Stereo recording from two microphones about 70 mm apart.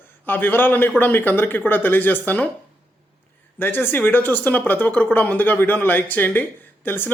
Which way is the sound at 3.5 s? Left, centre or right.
Left.